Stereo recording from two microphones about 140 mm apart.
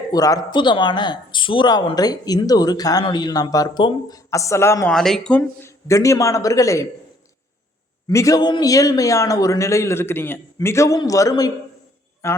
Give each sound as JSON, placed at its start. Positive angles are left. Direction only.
{"t": 0.1, "sound": "a man's voice", "side_deg": 25}
{"t": 4.9, "sound": "speech", "side_deg": 5}
{"t": 5.4, "sound": "a man's voice", "side_deg": 20}
{"t": 8.1, "sound": "a man's voice", "side_deg": 25}